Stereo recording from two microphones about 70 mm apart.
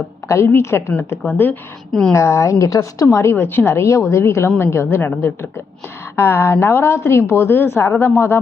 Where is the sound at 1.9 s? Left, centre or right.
Centre.